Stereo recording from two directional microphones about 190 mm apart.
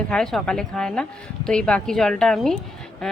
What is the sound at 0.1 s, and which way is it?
Speech, 5° left (ahead or behind).